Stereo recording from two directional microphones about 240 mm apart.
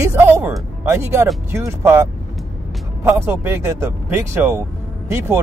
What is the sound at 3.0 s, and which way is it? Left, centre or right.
Speech, centre.